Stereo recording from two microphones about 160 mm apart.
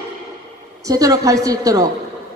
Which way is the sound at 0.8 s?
20° right (ahead or behind).